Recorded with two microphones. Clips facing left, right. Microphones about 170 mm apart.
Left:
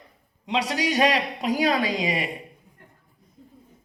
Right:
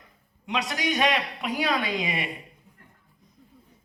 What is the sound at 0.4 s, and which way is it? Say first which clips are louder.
A man's voice: left 3 dB; 30° left (ahead or behind).